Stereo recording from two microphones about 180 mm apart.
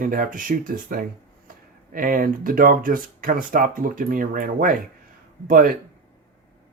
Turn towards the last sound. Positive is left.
turn(degrees=-50)  # may be behind; listen again after turning